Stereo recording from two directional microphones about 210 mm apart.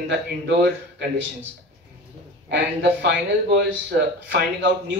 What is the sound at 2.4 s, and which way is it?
Speech, 55° right (ahead or behind).